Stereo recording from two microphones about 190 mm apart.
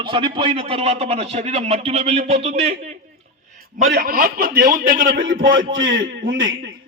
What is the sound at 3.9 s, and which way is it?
A man's voice, 50° right (ahead or behind).